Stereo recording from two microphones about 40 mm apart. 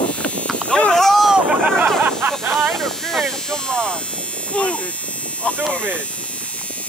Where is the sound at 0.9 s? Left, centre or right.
Centre.